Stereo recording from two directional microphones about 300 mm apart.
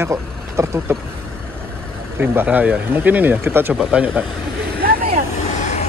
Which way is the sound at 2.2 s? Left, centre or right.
Centre.